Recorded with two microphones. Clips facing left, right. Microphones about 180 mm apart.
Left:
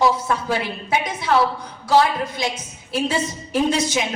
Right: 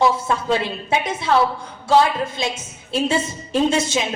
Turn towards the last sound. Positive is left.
turn(degrees=-25)  # may be behind; listen again after turning